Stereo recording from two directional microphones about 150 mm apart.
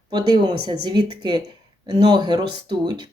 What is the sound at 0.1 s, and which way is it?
Speech, 30° right (ahead or behind).